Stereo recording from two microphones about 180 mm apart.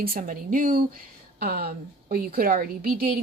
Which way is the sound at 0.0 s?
50° right (ahead or behind).